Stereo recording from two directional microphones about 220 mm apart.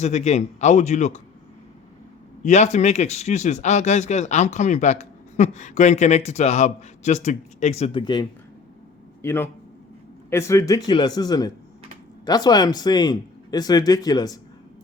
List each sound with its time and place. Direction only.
0.0 s speech: 30° left (ahead or behind)
2.4 s speech: 30° left (ahead or behind)